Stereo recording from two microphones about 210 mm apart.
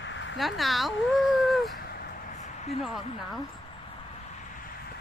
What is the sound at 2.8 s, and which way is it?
Speech, centre (ahead or behind).